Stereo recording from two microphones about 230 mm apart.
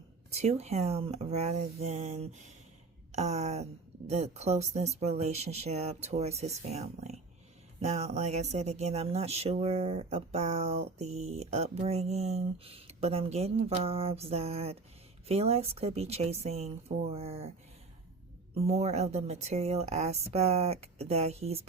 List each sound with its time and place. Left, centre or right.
0.3 s speech: right
18.5 s speech: right